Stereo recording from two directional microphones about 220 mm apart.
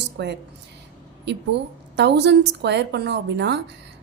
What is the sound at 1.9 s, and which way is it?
A woman's voice, 50° right (ahead or behind).